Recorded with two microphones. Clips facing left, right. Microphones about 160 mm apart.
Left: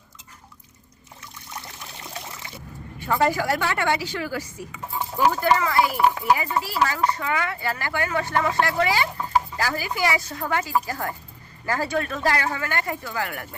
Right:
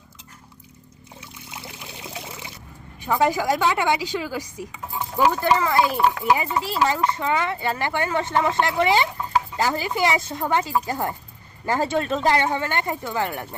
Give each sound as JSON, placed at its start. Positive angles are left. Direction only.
{"t": 1.5, "sound": "trickle", "side_deg": -10}
{"t": 3.0, "sound": "a woman's voice", "side_deg": -15}